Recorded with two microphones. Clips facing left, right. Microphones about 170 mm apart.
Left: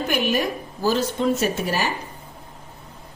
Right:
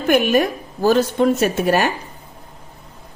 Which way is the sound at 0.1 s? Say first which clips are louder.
Right 9 dB; 55° right (ahead or behind).